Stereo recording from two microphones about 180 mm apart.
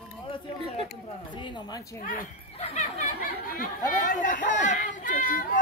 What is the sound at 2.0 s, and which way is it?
Speech, 50° left (ahead or behind).